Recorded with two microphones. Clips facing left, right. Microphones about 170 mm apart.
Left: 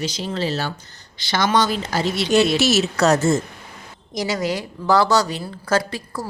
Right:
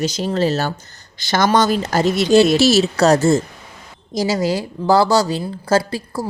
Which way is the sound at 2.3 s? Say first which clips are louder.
Right 5 dB; 35° right (ahead or behind).